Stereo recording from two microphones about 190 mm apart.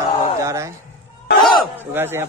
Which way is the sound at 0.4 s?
15° right (ahead or behind).